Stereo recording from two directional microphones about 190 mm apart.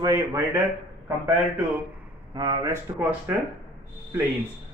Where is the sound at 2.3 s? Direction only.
20° right (ahead or behind).